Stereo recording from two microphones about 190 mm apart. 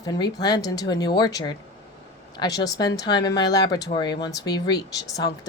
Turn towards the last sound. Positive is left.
turn(degrees=20)  # may be behind; listen again after turning